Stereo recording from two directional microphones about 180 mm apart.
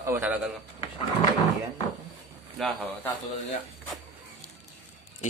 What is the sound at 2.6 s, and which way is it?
Speech, 5° left (ahead or behind).